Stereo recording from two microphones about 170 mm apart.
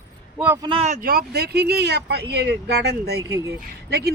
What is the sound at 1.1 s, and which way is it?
Speech, 65° right (ahead or behind).